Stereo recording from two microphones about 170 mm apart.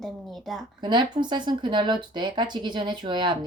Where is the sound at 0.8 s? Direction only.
25° right (ahead or behind).